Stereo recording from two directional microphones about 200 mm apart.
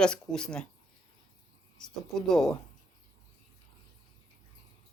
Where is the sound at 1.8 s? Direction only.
Centre (ahead or behind).